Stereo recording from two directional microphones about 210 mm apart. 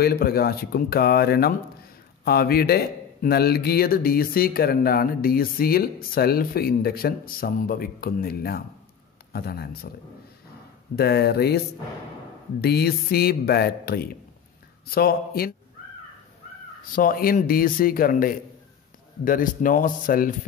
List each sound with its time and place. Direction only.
0.0 s a man's voice: 50° left (ahead or behind)
11.0 s a man's voice: 50° left (ahead or behind)
16.9 s a man's voice: 45° left (ahead or behind)